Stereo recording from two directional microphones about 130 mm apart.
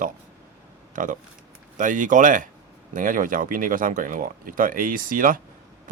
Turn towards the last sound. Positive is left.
turn(degrees=-90)